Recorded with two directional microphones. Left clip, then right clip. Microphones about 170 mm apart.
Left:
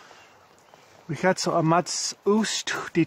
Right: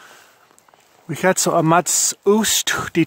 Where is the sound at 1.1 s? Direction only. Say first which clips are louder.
Right 6 dB; 55° right (ahead or behind).